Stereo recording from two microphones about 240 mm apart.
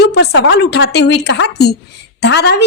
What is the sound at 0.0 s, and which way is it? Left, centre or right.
A woman's voice, left.